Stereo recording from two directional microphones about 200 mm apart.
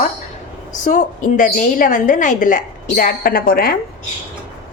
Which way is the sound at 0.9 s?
40° left (ahead or behind).